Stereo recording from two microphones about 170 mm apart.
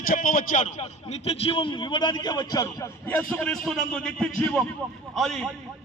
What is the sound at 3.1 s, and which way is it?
A man's voice, 10° left (ahead or behind).